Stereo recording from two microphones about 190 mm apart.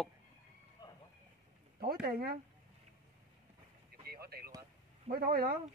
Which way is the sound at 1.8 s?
50° right (ahead or behind).